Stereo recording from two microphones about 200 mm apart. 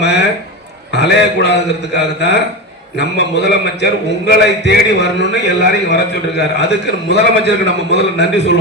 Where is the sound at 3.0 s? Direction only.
60° left (ahead or behind).